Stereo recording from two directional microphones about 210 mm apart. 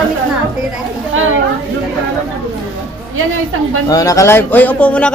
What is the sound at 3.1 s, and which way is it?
Speech, 80° right.